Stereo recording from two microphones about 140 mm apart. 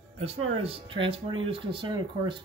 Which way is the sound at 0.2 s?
45° right (ahead or behind).